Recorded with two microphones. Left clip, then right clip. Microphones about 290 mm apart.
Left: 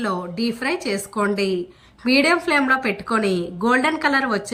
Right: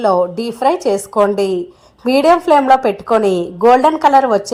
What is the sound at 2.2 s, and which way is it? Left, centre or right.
Speech, right.